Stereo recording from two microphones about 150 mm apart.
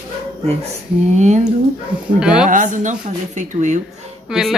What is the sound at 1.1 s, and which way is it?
Speech, 50° right (ahead or behind).